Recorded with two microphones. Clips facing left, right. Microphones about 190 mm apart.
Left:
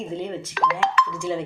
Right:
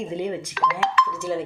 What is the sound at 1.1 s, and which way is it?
Speech, 5° right (ahead or behind).